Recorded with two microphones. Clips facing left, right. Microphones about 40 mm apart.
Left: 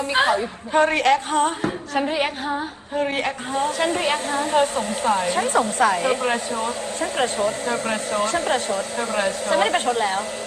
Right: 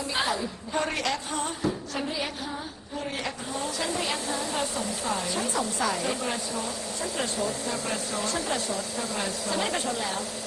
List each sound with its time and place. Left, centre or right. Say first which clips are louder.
0.1 s a woman's voice: left 9 dB; left